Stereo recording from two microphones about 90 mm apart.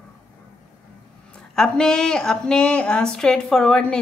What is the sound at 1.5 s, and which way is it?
A woman's voice, 10° left (ahead or behind).